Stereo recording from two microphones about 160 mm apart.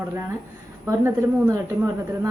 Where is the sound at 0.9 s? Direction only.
20° right (ahead or behind).